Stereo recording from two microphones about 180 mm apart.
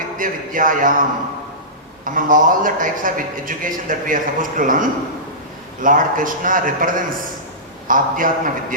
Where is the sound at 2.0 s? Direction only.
50° right (ahead or behind).